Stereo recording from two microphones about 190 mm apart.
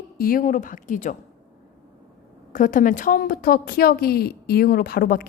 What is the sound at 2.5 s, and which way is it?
A woman's voice, 45° left (ahead or behind).